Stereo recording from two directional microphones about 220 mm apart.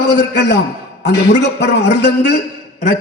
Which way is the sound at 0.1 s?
50° left (ahead or behind).